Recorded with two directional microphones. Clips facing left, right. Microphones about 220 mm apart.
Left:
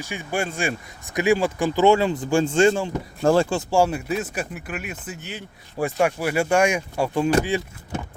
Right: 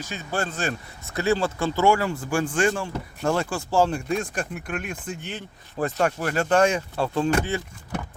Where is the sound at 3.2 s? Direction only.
30° left (ahead or behind).